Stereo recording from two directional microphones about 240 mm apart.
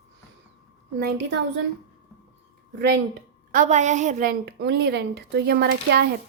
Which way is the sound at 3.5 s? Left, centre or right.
Right.